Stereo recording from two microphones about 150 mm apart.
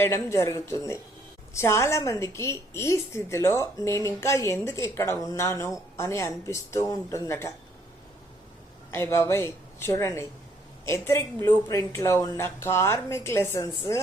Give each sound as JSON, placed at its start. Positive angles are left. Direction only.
{"t": 0.0, "sound": "a woman's voice", "side_deg": 20}
{"t": 8.9, "sound": "a woman's voice", "side_deg": 15}